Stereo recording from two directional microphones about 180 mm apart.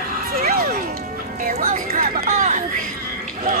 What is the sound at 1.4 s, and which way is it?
Music, 40° right (ahead or behind).